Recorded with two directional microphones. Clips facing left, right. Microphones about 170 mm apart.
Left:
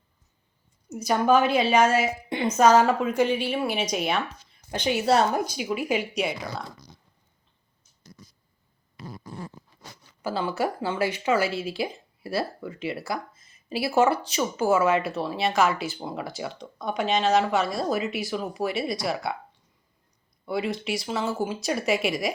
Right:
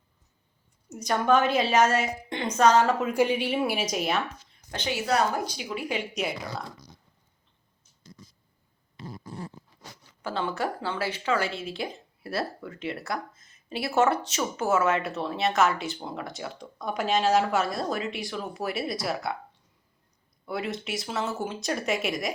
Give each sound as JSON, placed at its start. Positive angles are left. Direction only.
{"t": 1.0, "sound": "speech", "side_deg": 5}
{"t": 3.0, "sound": "speech", "side_deg": -10}
{"t": 3.9, "sound": "speech", "side_deg": 0}
{"t": 4.7, "sound": "speech", "side_deg": 15}
{"t": 5.0, "sound": "speech", "side_deg": 25}
{"t": 5.5, "sound": "speech", "side_deg": 10}
{"t": 10.2, "sound": "speech", "side_deg": 5}
{"t": 20.4, "sound": "speech", "side_deg": 0}